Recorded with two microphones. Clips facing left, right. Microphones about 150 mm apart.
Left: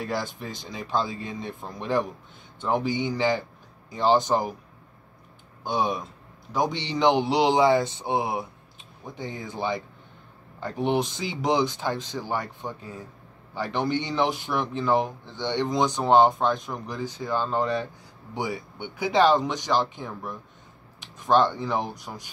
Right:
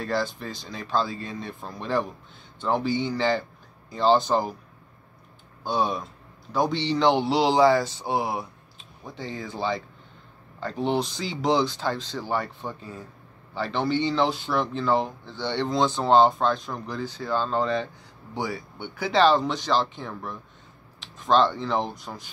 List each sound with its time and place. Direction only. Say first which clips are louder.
0.0 s speech: right 2 dB; 20° left (ahead or behind)
5.6 s speech: even; 20° left (ahead or behind)